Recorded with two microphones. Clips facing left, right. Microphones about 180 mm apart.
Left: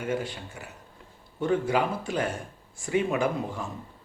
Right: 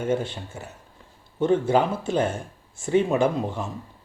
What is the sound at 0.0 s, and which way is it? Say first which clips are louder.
Speech: right 5 dB; 25° right (ahead or behind).